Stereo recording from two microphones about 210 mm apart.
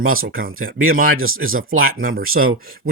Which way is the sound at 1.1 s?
75° right (ahead or behind).